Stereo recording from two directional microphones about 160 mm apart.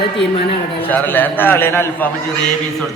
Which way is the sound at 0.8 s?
10° left (ahead or behind).